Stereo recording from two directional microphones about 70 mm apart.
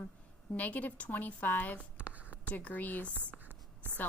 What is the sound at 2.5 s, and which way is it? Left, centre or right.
Speech, left.